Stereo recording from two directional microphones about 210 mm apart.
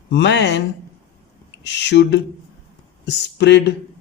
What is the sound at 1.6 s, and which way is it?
Speech, 55° left (ahead or behind).